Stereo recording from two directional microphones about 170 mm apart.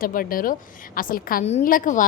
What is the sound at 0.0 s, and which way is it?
A woman's voice, 55° left (ahead or behind).